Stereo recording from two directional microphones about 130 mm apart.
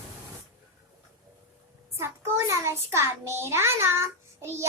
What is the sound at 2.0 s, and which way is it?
A child's voice, 20° right (ahead or behind).